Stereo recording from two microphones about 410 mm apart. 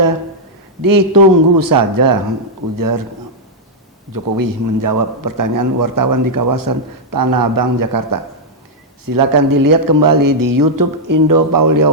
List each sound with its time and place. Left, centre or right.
0.8 s a man's voice: right
4.1 s a man's voice: right